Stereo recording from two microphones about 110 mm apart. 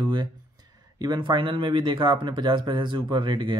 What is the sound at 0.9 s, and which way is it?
Speech, 40° right (ahead or behind).